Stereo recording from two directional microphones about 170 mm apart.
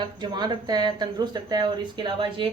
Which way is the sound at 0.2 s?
25° right (ahead or behind).